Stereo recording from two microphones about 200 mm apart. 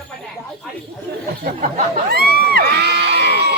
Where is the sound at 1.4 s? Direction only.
50° right (ahead or behind).